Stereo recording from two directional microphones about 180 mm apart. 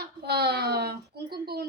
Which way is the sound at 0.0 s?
65° right (ahead or behind).